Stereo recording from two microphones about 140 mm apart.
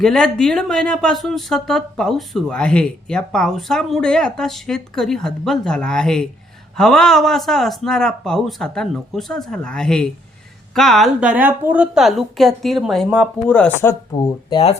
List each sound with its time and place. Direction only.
0.0 s speech: 5° left (ahead or behind)
13.5 s speech: 15° left (ahead or behind)
14.2 s speech: 35° left (ahead or behind)